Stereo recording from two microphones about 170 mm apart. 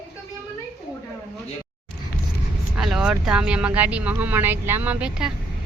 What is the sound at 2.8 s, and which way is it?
Speech, 5° right (ahead or behind).